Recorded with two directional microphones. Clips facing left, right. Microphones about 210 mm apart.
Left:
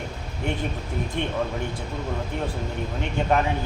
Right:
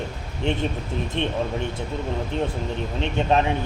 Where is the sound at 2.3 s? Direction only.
20° right (ahead or behind).